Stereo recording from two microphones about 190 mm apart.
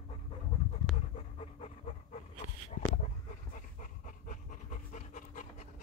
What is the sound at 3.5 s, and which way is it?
Pant, 45° left (ahead or behind).